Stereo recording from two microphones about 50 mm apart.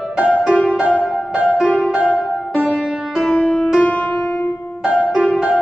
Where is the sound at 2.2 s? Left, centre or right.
Centre.